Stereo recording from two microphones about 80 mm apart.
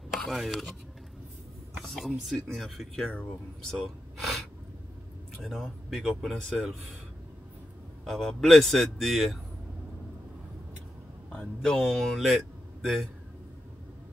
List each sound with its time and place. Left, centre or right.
0.3 s speech: centre
1.8 s speech: centre
3.1 s speech: centre
3.7 s a sound: centre
5.4 s speech: centre
8.0 s speech: centre
11.3 s speech: centre